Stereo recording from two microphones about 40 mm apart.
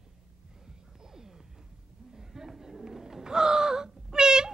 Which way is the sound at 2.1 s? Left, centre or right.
Centre.